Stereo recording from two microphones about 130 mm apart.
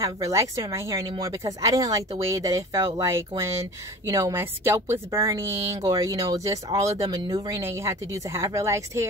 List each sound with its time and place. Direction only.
0.0 s a woman's voice: 25° right (ahead or behind)